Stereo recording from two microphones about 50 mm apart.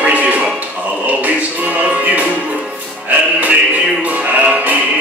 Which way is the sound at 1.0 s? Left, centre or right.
Right.